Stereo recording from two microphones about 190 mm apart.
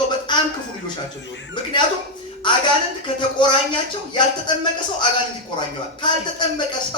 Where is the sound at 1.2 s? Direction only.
70° left (ahead or behind).